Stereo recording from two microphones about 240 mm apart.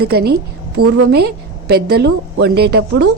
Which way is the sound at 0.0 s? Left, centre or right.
Right.